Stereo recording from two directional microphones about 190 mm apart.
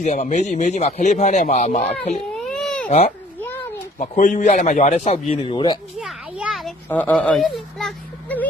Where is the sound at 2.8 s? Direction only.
35° left (ahead or behind).